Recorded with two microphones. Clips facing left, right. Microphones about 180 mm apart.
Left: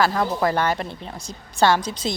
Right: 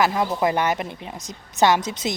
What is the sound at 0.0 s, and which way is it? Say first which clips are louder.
A woman's voice: even; 15° right (ahead or behind).